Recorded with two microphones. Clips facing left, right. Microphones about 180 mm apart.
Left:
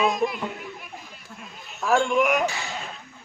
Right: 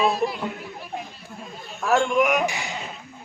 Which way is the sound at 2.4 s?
15° right (ahead or behind).